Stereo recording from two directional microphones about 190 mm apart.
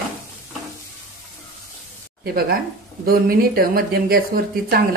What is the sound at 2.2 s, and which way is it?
Speech, 50° right (ahead or behind).